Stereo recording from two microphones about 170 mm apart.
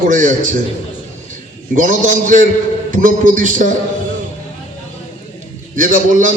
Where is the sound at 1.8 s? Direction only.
50° right (ahead or behind).